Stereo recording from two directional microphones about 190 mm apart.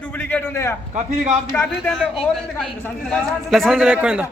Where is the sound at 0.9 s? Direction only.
40° right (ahead or behind).